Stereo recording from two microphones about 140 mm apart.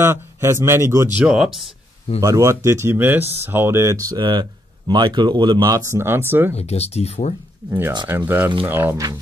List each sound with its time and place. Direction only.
0.0 s speech: 20° right (ahead or behind)
1.2 s speech: 5° right (ahead or behind)
2.1 s speech: 20° right (ahead or behind)
6.5 s speech: 50° left (ahead or behind)
8.1 s speech: 15° right (ahead or behind)